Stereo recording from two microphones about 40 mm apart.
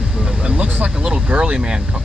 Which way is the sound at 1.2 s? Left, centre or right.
Right.